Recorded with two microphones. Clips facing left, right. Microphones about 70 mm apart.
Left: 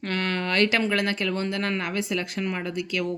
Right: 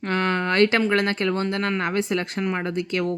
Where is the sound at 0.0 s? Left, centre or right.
Right.